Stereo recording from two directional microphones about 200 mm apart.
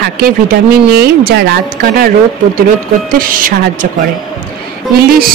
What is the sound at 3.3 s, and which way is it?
Speech, 45° right (ahead or behind).